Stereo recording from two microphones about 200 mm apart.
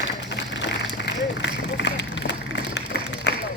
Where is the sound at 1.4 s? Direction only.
60° left (ahead or behind).